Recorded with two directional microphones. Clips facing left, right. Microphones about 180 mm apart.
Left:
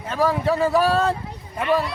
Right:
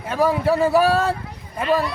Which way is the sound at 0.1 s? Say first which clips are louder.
Right 2 dB; 10° right (ahead or behind).